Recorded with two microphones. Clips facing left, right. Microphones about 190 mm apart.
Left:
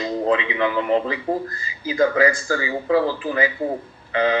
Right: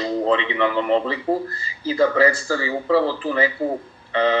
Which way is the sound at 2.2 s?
35° right (ahead or behind).